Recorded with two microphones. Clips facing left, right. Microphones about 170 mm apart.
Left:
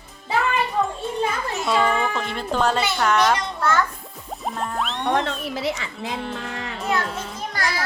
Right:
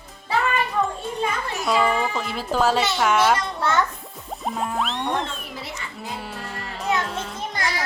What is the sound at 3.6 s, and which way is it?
Speech, 20° right (ahead or behind).